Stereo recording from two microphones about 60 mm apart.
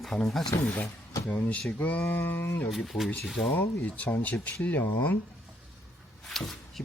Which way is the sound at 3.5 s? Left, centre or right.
Left.